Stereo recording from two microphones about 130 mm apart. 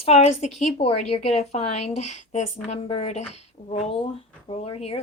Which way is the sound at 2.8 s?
50° left (ahead or behind).